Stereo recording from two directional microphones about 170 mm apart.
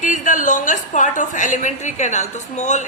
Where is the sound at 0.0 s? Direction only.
50° left (ahead or behind).